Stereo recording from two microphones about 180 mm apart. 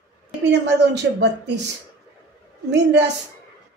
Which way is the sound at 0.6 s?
75° right (ahead or behind).